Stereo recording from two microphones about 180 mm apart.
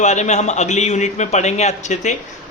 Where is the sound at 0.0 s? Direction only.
40° left (ahead or behind).